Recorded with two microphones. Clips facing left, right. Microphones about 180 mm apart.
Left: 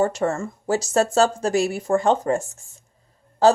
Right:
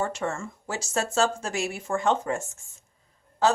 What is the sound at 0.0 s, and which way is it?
A woman's voice, 40° left (ahead or behind).